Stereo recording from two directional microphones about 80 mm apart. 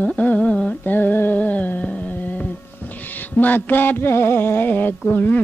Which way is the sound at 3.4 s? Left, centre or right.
Left.